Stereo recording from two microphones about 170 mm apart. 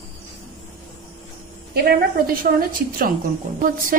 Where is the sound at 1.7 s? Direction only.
60° right (ahead or behind).